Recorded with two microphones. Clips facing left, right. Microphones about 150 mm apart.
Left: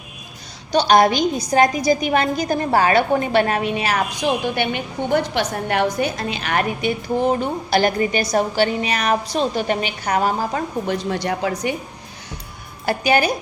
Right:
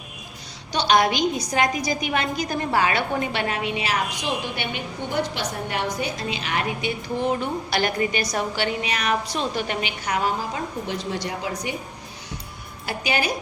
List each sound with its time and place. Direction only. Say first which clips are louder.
0.7 s a woman's voice: left 5 dB; 40° left (ahead or behind); by 11.7 s 65° left (ahead or behind)
12.8 s a woman's voice: left 7 dB; 50° left (ahead or behind)